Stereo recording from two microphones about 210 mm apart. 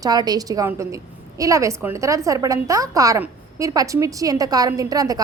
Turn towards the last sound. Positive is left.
turn(degrees=-15)  # may be behind; listen again after turning